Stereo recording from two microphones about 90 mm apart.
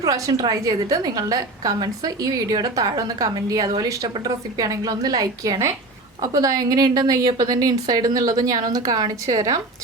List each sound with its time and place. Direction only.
0.0 s a woman's voice: 40° right (ahead or behind)